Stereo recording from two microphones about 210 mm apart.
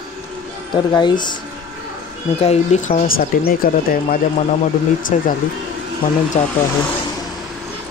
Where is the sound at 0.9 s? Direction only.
20° left (ahead or behind).